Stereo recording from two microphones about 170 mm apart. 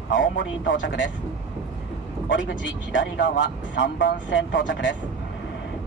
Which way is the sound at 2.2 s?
90° left.